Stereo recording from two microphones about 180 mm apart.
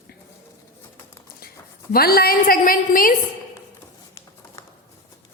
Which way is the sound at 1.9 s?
60° left (ahead or behind).